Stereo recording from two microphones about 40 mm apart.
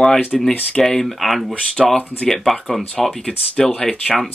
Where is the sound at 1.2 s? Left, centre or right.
Centre.